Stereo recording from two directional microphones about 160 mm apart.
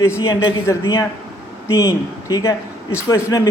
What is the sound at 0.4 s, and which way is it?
Speech, 20° left (ahead or behind).